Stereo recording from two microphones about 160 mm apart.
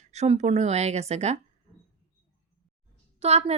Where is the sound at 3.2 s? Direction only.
40° right (ahead or behind).